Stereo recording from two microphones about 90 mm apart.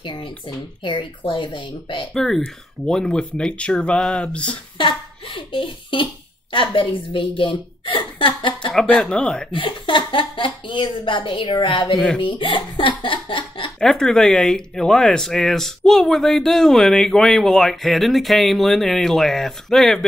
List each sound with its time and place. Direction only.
0.0 s a woman's voice: 60° left (ahead or behind)
2.1 s speech: centre (ahead or behind)
4.7 s a child's voice: 70° left (ahead or behind)
8.7 s speech: 5° left (ahead or behind)
9.5 s a woman's voice: 70° left (ahead or behind)
13.7 s speech: 5° left (ahead or behind)